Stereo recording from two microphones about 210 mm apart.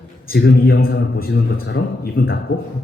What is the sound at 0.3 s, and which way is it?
A man's voice, 50° left (ahead or behind).